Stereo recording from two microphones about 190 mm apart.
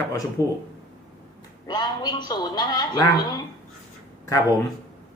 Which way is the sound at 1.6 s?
20° left (ahead or behind).